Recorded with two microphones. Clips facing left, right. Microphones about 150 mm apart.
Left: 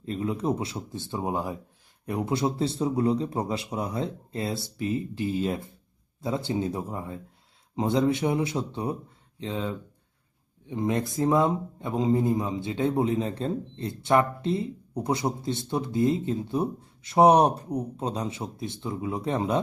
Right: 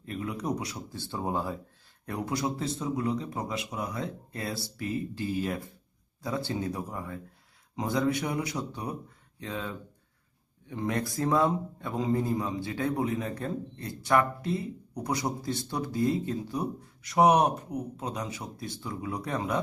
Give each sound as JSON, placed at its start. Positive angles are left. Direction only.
{"t": 0.0, "sound": "a man's voice", "side_deg": 25}